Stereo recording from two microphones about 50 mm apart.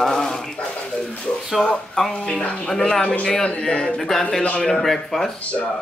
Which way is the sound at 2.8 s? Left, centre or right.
Centre.